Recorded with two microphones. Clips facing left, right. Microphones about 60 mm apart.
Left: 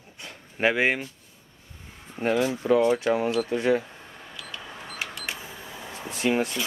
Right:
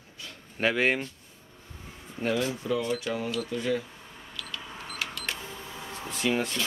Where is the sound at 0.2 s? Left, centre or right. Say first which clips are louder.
Left 3 dB; left.